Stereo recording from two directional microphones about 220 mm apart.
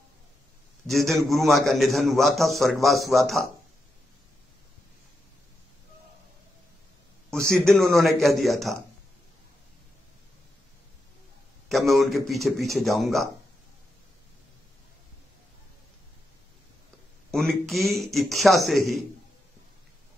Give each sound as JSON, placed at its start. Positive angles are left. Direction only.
{"t": 0.8, "sound": "a man's voice", "side_deg": 0}
{"t": 7.2, "sound": "a man's voice", "side_deg": 0}
{"t": 11.7, "sound": "speech", "side_deg": 0}
{"t": 17.3, "sound": "a man's voice", "side_deg": 0}